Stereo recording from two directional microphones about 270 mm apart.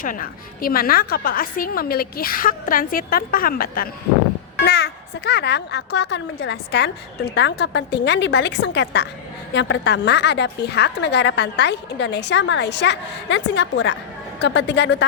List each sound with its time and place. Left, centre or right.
0.0 s a woman's voice: left